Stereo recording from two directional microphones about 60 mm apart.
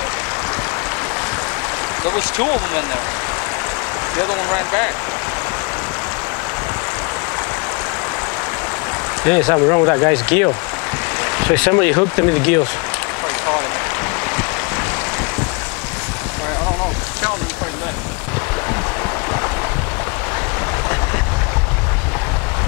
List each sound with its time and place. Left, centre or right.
2.0 s speech: left
4.2 s speech: left
9.2 s speech: left